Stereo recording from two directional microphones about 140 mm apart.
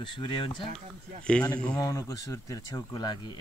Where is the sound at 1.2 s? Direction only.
5° left (ahead or behind).